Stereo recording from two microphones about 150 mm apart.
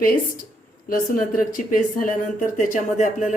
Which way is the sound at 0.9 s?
65° left (ahead or behind).